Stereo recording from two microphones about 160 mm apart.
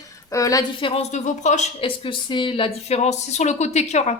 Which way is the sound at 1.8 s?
35° left (ahead or behind).